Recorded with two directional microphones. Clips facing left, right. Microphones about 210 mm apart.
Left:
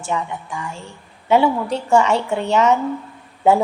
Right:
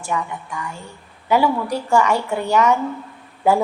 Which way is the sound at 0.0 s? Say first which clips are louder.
Left 1 dB; 25° left (ahead or behind).